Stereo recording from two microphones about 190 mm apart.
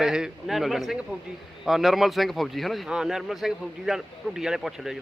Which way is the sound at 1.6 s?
Centre (ahead or behind).